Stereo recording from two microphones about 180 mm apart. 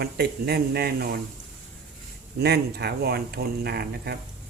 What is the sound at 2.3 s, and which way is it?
Speech, 65° right (ahead or behind).